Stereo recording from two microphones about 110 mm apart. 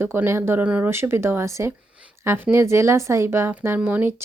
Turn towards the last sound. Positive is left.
turn(degrees=-20)  # may be behind; listen again after turning